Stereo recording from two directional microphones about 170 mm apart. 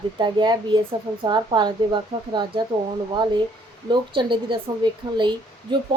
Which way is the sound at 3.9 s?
30° right (ahead or behind).